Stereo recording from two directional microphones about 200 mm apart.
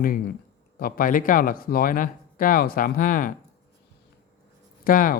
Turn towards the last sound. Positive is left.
turn(degrees=45)  # may be behind; listen again after turning